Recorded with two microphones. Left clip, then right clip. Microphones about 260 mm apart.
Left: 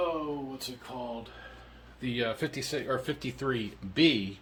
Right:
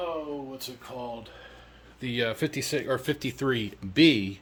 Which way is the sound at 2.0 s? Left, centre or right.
Right.